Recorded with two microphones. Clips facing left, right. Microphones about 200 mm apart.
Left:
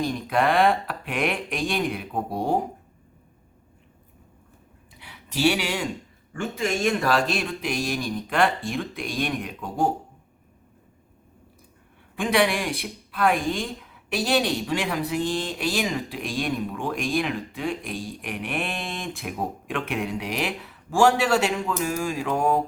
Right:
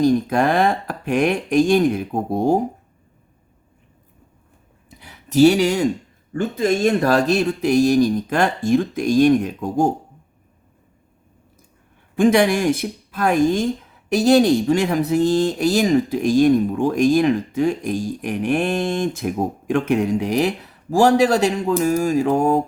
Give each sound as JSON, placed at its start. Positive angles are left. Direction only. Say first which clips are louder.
{"t": 0.0, "sound": "speech", "louder": "right 7 dB", "side_deg": -45}
{"t": 4.9, "sound": "a sound", "louder": "right 10 dB", "side_deg": -45}
{"t": 6.3, "sound": "speech", "louder": "right 7 dB", "side_deg": -35}
{"t": 12.1, "sound": "speech", "louder": "right 7 dB", "side_deg": -45}